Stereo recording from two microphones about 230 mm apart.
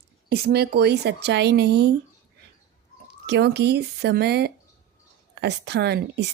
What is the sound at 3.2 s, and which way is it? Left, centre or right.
Speech, right.